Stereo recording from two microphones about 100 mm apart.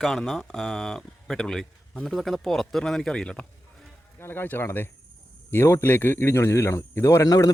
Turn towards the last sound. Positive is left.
turn(degrees=35)  # may be behind; listen again after turning